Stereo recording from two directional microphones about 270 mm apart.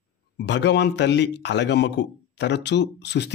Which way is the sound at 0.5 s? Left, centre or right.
Left.